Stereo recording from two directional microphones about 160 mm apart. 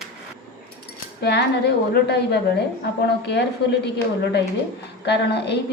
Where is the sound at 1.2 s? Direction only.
90° left.